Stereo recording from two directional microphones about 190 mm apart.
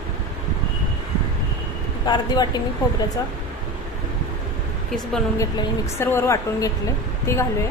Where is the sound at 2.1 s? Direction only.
20° left (ahead or behind).